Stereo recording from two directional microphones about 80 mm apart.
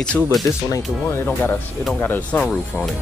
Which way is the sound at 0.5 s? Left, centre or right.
Left.